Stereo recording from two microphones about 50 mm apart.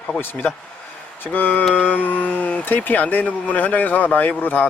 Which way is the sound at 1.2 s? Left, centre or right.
Left.